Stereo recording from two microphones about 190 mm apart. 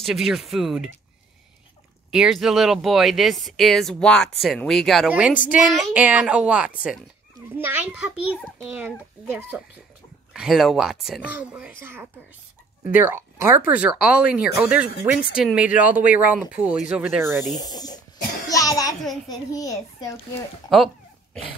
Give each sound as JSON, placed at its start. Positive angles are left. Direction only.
{"t": 0.0, "sound": "speech", "side_deg": 0}
{"t": 2.0, "sound": "speech", "side_deg": 0}
{"t": 17.6, "sound": "a child's voice", "side_deg": 20}
{"t": 20.7, "sound": "a sound", "side_deg": 0}